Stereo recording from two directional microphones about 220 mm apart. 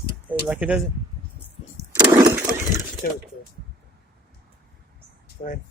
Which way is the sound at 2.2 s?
15° right (ahead or behind).